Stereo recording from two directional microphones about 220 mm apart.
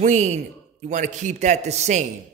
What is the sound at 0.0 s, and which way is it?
A man's voice, 30° right (ahead or behind).